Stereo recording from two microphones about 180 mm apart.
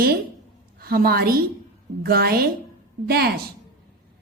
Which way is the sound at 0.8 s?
55° right (ahead or behind).